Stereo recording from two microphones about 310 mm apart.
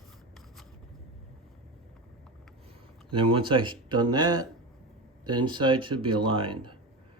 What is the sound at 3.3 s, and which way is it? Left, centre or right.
Speech, centre.